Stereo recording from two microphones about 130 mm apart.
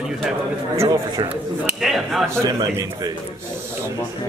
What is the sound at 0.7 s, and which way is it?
Speech, 20° right (ahead or behind).